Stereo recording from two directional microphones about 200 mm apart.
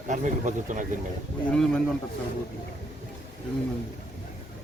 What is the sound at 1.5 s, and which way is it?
Speech, 5° left (ahead or behind).